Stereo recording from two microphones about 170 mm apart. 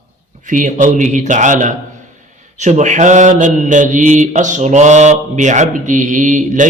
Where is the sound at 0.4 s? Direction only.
50° right (ahead or behind).